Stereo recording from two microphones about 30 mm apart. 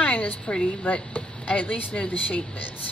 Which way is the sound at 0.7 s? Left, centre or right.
Left.